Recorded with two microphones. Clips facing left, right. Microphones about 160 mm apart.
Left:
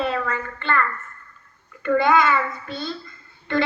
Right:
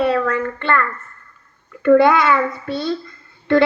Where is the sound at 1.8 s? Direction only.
70° right (ahead or behind).